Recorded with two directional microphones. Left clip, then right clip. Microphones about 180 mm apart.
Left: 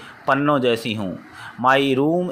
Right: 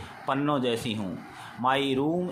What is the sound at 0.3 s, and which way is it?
Speech, 30° left (ahead or behind).